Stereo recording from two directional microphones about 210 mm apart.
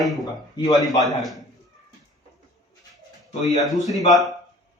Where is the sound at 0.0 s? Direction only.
Centre (ahead or behind).